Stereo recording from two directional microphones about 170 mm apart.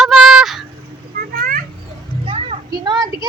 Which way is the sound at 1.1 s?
60° right (ahead or behind).